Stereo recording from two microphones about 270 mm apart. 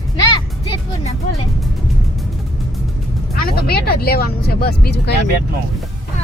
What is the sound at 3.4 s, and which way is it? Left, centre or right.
Speech, left.